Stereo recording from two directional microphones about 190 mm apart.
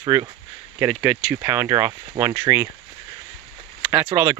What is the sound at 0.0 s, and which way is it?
Speech, 15° right (ahead or behind).